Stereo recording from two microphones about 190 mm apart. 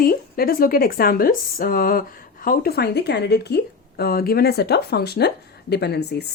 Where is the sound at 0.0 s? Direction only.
50° left (ahead or behind).